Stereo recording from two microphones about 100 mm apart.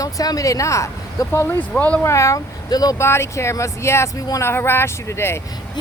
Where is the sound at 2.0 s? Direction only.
30° left (ahead or behind).